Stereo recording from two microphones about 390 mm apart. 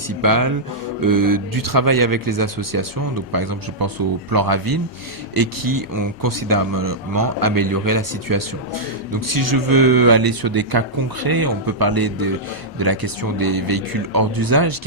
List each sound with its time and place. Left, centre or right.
0.2 s speech: right